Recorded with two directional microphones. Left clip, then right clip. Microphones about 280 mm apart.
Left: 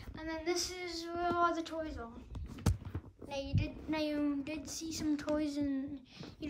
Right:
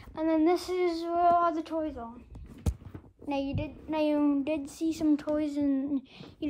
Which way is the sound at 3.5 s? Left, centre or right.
Centre.